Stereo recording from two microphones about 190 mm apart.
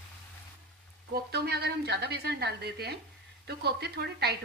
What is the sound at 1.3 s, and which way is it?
Speech, 60° right (ahead or behind).